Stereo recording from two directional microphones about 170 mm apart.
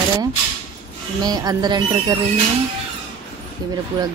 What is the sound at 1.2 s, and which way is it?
Speech, 25° right (ahead or behind).